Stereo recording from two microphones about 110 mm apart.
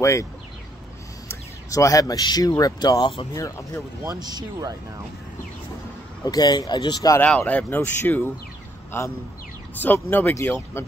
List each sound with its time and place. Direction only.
0.0 s speech: 25° left (ahead or behind)
1.3 s speech: 30° left (ahead or behind); by 3.3 s 45° left (ahead or behind)
3.3 s speech: 30° left (ahead or behind)
4.0 s speech: 35° right (ahead or behind)
6.2 s speech: 40° left (ahead or behind)
7.2 s speech: 10° left (ahead or behind)
9.8 s speech: 20° left (ahead or behind)